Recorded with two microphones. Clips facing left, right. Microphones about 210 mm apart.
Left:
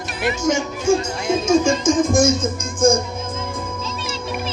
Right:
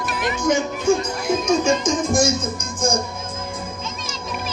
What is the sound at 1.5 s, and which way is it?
Music, 50° left (ahead or behind).